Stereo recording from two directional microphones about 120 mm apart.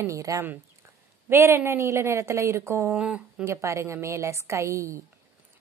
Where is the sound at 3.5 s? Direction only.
25° right (ahead or behind).